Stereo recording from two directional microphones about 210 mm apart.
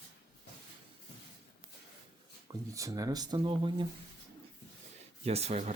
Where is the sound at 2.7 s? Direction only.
15° right (ahead or behind).